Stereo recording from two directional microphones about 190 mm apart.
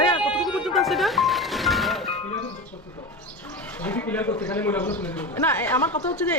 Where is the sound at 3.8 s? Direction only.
10° left (ahead or behind).